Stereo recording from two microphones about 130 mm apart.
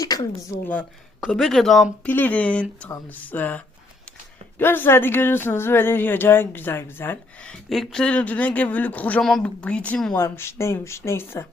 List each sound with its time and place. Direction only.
0.0 s a sound: 30° left (ahead or behind)
0.6 s speech: 15° left (ahead or behind)
2.0 s speech: 15° left (ahead or behind)
10.2 s speech: 20° left (ahead or behind)